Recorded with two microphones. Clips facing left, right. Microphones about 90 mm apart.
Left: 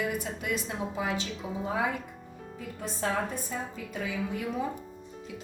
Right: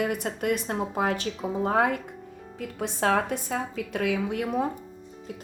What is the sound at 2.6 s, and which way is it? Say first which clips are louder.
A woman's voice: right 6 dB; 90° right.